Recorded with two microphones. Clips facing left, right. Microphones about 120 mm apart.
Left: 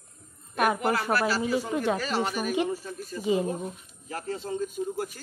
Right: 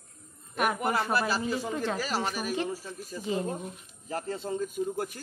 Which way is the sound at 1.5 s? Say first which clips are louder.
Left 4 dB; 15° left (ahead or behind).